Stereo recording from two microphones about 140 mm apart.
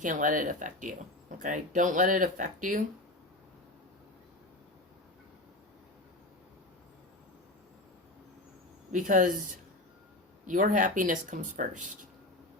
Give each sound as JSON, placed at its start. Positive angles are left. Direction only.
{"t": 0.0, "sound": "speech", "side_deg": -65}
{"t": 8.9, "sound": "speech", "side_deg": -65}